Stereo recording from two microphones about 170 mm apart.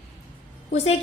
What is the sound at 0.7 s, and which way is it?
Speech, 40° left (ahead or behind).